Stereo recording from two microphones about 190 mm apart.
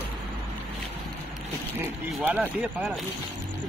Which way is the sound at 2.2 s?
10° right (ahead or behind).